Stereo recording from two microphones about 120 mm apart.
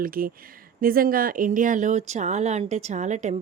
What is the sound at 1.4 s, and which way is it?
A woman's voice, 90° right.